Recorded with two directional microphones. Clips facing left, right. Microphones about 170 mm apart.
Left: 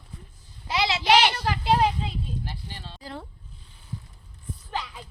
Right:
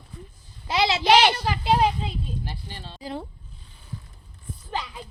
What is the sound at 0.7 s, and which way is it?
Speech, 25° right (ahead or behind).